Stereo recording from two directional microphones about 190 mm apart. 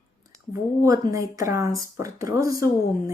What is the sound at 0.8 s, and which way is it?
Speech, 20° right (ahead or behind).